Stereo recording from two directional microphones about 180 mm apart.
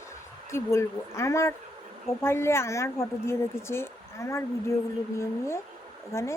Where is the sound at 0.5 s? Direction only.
15° left (ahead or behind).